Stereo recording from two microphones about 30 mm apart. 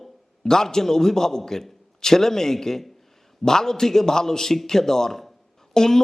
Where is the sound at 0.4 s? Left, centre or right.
Centre.